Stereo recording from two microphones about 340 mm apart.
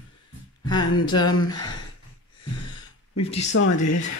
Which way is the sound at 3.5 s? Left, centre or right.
Left.